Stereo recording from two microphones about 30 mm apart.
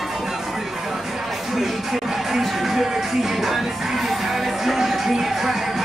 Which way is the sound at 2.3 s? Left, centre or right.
Centre.